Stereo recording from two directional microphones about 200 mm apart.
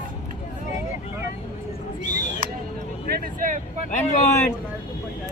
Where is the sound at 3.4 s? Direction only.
45° right (ahead or behind).